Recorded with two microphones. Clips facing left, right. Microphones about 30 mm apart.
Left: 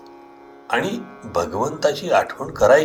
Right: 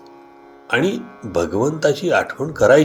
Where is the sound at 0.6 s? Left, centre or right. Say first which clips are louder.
Right 3 dB; centre.